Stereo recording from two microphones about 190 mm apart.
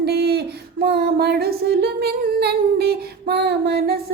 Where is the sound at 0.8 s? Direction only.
60° right (ahead or behind).